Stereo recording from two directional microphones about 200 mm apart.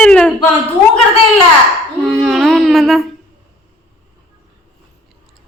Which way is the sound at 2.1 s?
Centre (ahead or behind).